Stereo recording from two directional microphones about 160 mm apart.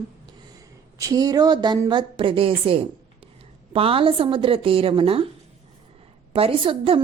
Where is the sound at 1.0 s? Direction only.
20° right (ahead or behind).